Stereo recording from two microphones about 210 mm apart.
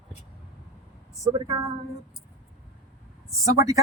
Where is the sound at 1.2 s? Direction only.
15° right (ahead or behind).